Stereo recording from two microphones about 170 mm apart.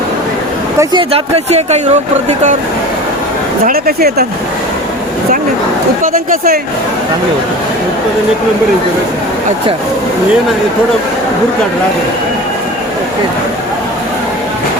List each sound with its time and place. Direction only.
1.1 s speech: 40° right (ahead or behind)
3.7 s speech: 65° right (ahead or behind)
6.0 s speech: 55° right (ahead or behind)